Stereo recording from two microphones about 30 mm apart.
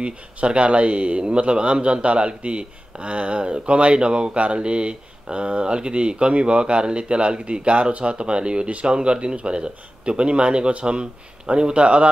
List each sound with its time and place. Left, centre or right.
0.0 s speech: right